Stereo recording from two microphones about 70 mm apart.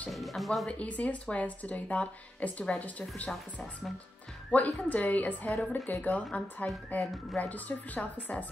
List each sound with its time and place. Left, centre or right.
0.1 s speech: centre
0.7 s speech: centre
4.5 s speech: left